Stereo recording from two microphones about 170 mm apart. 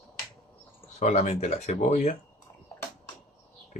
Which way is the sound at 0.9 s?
40° left (ahead or behind).